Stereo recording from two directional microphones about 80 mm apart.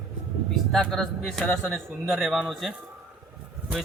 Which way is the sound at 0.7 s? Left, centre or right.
Centre.